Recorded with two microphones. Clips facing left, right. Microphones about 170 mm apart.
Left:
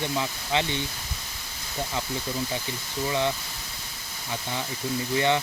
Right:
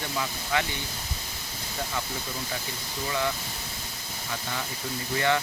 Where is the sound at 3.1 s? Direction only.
20° left (ahead or behind).